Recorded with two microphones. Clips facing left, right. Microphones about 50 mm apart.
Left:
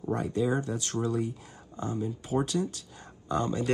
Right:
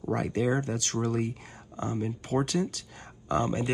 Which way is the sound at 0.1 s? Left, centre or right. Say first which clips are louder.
Right 1 dB; right.